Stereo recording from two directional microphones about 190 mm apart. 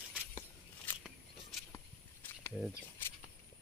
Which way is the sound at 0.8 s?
10° left (ahead or behind).